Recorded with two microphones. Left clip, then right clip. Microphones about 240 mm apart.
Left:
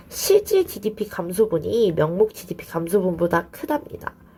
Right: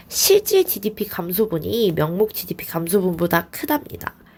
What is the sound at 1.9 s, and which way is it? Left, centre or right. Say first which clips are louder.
Speech: left 1 dB; right.